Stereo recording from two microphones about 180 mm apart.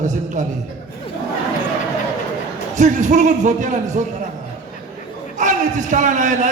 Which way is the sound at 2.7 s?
45° right (ahead or behind).